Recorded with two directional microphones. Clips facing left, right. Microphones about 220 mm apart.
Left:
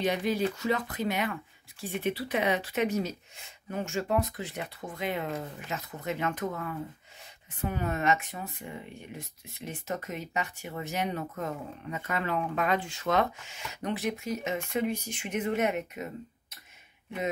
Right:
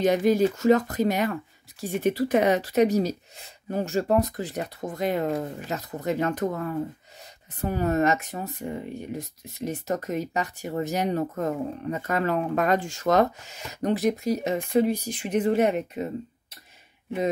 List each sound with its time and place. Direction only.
0.0 s speech: 45° right (ahead or behind)